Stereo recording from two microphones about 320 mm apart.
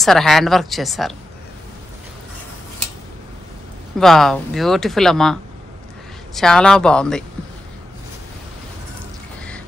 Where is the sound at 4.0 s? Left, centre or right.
Centre.